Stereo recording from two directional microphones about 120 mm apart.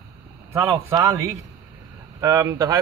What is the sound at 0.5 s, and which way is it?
Speech, 20° right (ahead or behind).